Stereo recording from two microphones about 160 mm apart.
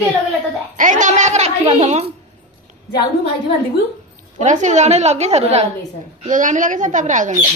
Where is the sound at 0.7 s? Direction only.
55° right (ahead or behind).